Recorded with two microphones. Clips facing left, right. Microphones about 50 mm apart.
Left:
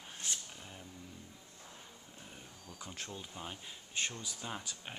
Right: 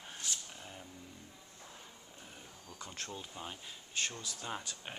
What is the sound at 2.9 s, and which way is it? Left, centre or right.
Speech, centre.